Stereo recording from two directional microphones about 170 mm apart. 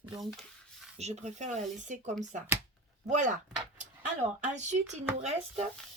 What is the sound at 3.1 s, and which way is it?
Speech, 45° right (ahead or behind).